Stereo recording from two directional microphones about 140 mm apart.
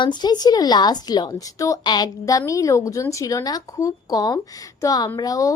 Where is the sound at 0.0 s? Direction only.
30° left (ahead or behind).